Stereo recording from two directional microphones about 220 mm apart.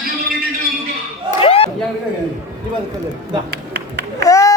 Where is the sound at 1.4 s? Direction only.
25° left (ahead or behind).